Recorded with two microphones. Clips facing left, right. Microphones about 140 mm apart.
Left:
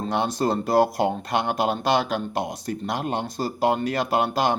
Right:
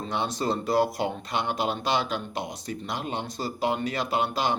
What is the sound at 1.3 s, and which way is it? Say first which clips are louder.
Speech: left 4 dB; 55° left (ahead or behind).